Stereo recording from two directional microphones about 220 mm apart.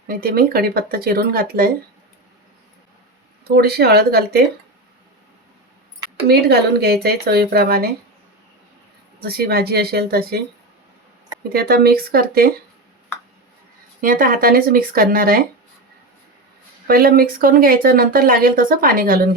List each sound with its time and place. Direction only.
0.1 s speech: 40° right (ahead or behind)
3.4 s speech: 45° right (ahead or behind)
6.2 s speech: 45° right (ahead or behind)
9.2 s speech: 45° right (ahead or behind)
11.4 s speech: 45° right (ahead or behind)
14.0 s speech: 40° right (ahead or behind)
16.8 s speech: 40° right (ahead or behind)